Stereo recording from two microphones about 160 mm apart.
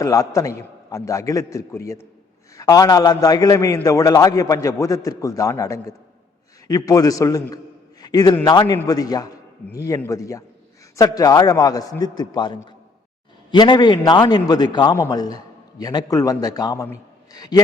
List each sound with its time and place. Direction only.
0.0 s a man's voice: 20° left (ahead or behind)